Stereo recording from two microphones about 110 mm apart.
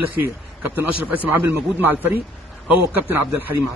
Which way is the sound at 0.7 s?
15° right (ahead or behind).